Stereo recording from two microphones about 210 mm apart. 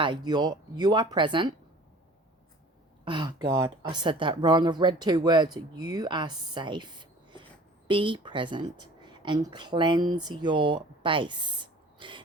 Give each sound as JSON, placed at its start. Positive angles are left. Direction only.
{"t": 0.0, "sound": "speech", "side_deg": -20}
{"t": 3.0, "sound": "speech", "side_deg": -20}